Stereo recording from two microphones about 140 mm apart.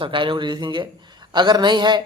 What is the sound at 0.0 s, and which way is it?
A woman's voice, 35° right (ahead or behind).